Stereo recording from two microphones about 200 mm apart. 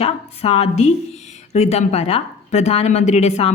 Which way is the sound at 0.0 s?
30° left (ahead or behind).